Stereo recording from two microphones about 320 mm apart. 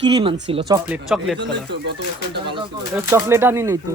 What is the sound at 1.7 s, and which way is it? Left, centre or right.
Speech, right.